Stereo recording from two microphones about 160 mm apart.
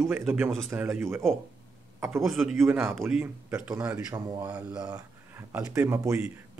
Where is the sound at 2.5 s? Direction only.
15° right (ahead or behind).